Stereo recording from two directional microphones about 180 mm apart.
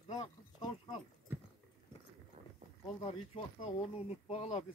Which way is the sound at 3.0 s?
30° left (ahead or behind).